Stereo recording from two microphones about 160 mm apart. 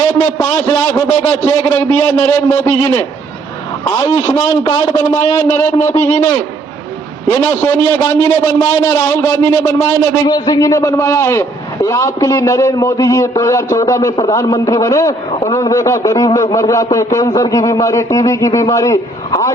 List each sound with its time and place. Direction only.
0.3 s a man's voice: 15° left (ahead or behind)
4.0 s a man's voice: 25° left (ahead or behind)
5.9 s a man's voice: 50° left (ahead or behind)
6.1 s a man's voice: 15° left (ahead or behind)
15.3 s a man's voice: 40° left (ahead or behind)
15.5 s a man's voice: 20° left (ahead or behind)